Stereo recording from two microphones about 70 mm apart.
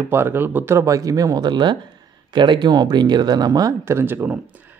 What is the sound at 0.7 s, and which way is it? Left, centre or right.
Speech, right.